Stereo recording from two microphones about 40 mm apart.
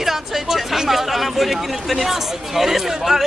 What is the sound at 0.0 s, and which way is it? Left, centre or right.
Speech, centre.